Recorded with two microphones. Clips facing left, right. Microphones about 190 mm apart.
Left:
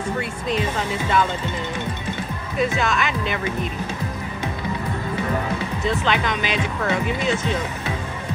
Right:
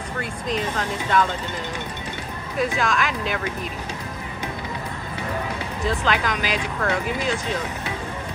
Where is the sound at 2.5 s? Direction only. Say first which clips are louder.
Left 1 dB; centre (ahead or behind).